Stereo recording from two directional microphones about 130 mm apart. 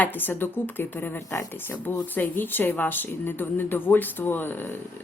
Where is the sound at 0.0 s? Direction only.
15° left (ahead or behind).